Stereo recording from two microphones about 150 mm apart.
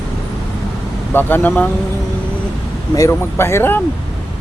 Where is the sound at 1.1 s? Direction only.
15° left (ahead or behind).